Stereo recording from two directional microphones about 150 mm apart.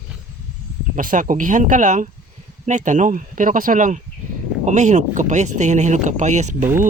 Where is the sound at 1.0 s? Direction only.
65° right (ahead or behind).